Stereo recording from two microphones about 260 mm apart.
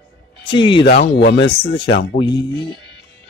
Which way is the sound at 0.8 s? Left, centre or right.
Left.